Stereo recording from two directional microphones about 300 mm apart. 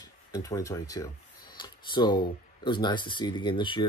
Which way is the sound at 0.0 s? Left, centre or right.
Centre.